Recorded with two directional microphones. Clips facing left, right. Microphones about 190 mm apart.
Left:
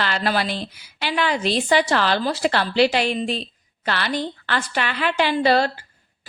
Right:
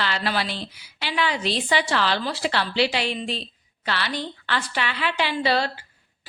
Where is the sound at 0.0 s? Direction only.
50° left (ahead or behind).